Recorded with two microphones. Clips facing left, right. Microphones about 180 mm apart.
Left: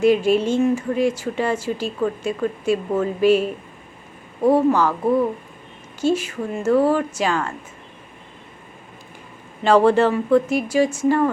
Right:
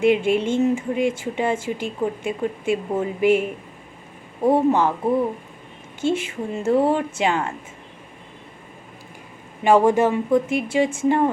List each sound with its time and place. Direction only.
0.0 s a woman's voice: 20° right (ahead or behind)
6.2 s a woman's voice: 25° right (ahead or behind)
9.6 s speech: 10° right (ahead or behind)